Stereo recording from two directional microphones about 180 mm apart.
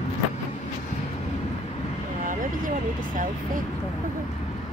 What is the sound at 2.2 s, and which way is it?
Vehicle, 50° right (ahead or behind).